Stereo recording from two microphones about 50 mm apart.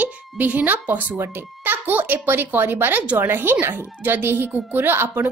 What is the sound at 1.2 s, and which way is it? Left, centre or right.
A child's voice, right.